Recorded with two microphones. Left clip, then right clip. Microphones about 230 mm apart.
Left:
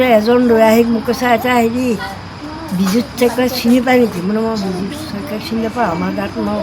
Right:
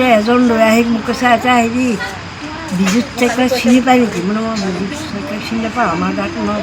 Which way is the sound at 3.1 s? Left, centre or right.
Left.